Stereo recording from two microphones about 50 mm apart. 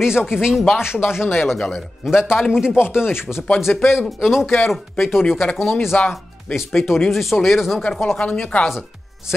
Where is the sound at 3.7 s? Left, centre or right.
Left.